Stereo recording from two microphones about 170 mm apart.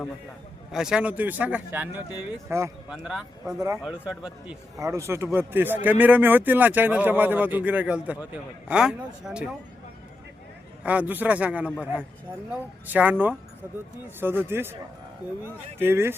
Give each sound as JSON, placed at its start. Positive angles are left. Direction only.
{"t": 0.7, "sound": "a man's voice", "side_deg": -5}
{"t": 2.9, "sound": "speech", "side_deg": -5}
{"t": 3.4, "sound": "a man's voice", "side_deg": -15}
{"t": 4.0, "sound": "speech", "side_deg": -5}
{"t": 4.8, "sound": "a man's voice", "side_deg": -20}
{"t": 10.8, "sound": "a man's voice", "side_deg": -10}
{"t": 15.8, "sound": "a man's voice", "side_deg": -15}